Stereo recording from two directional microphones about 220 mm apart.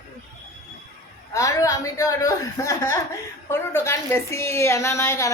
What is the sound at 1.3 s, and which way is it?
A woman's voice, 15° left (ahead or behind).